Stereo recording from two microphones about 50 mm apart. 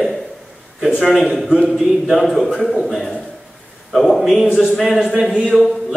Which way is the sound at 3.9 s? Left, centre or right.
Centre.